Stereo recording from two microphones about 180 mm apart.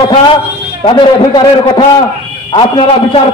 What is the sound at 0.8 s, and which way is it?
A man's voice, 25° left (ahead or behind).